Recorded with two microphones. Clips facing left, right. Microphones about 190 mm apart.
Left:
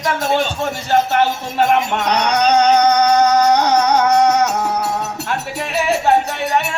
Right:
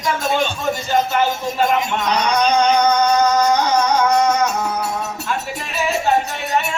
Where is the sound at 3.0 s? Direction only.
70° left (ahead or behind).